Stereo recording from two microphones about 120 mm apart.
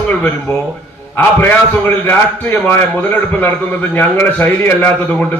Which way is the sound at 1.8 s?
15° left (ahead or behind).